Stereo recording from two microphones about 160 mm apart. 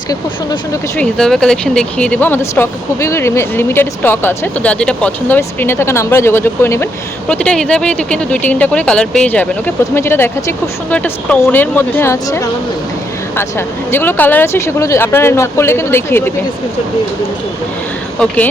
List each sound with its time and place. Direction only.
0.9 s speech: 5° left (ahead or behind)